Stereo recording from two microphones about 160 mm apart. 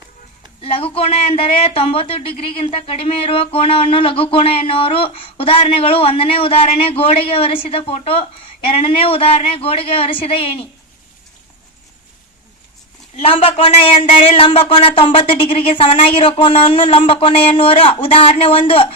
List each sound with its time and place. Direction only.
0.6 s speech: 35° left (ahead or behind)
13.1 s speech: 35° left (ahead or behind)